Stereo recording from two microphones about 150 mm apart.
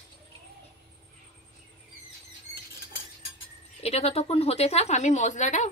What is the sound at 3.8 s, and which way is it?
Speech, 45° left (ahead or behind).